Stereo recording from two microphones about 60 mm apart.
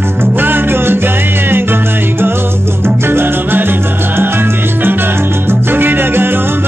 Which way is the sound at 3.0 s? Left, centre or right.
Right.